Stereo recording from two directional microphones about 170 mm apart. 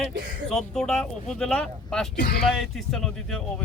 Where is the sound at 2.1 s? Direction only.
70° left (ahead or behind).